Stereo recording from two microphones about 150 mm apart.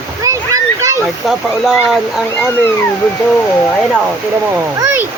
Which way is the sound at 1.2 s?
Centre (ahead or behind).